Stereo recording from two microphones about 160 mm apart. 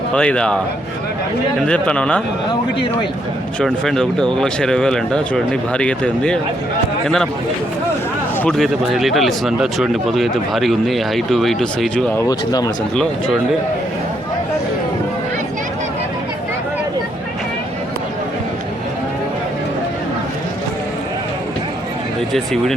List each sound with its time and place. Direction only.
0.1 s speech: 5° left (ahead or behind)
1.6 s speech: 5° left (ahead or behind)
3.6 s speech: 5° left (ahead or behind)
8.4 s speech: 5° left (ahead or behind)
12.3 s speech: 25° left (ahead or behind)